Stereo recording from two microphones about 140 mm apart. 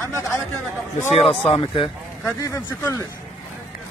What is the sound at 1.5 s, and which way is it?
Speech, 40° left (ahead or behind).